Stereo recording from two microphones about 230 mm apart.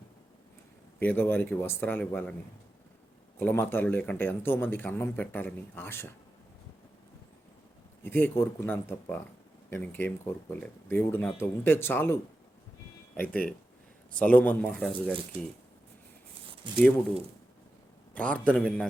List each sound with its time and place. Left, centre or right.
0.9 s a man's voice: centre
3.3 s a man's voice: centre
8.0 s a man's voice: centre
16.7 s speech: right
18.1 s speech: centre